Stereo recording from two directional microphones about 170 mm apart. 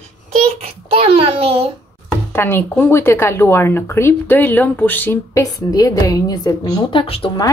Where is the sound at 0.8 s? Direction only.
35° right (ahead or behind).